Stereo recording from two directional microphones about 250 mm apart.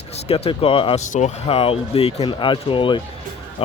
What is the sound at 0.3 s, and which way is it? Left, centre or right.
Speech, left.